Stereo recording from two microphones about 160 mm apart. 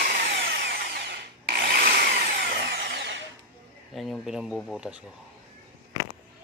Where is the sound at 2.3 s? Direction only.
75° right (ahead or behind); by 3.2 s 90° right.